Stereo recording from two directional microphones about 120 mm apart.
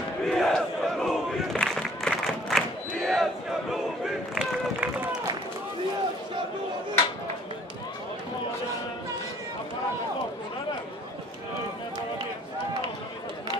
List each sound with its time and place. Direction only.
0.3 s battle cry: 5° left (ahead or behind)
3.7 s crowd: 5° right (ahead or behind)